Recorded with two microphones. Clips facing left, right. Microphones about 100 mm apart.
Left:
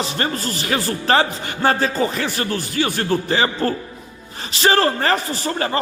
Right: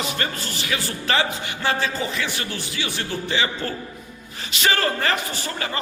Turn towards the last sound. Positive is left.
turn(degrees=40)  # may be behind; listen again after turning